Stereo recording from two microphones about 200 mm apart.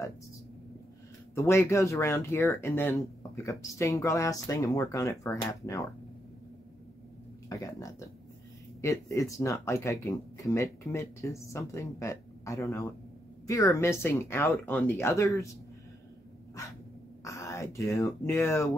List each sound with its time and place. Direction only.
1.3 s speech: 15° left (ahead or behind)
7.4 s speech: 15° left (ahead or behind)
17.2 s a sound: 15° left (ahead or behind)
18.2 s speech: 15° left (ahead or behind)